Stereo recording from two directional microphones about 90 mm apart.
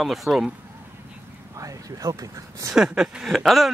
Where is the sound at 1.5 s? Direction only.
40° right (ahead or behind).